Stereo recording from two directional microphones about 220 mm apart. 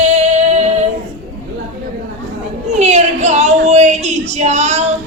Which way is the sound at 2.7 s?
30° right (ahead or behind).